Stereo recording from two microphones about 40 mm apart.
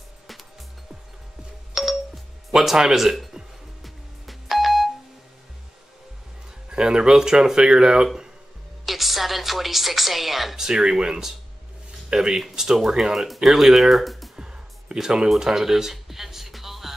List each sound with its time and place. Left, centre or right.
1.8 s music: centre
2.5 s speech: centre
3.8 s music: centre
6.7 s speech: right
8.8 s a woman's voice: centre
13.3 s speech: centre
14.3 s music: centre